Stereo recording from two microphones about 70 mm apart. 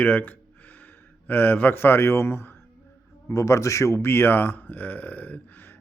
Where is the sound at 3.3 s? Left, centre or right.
Left.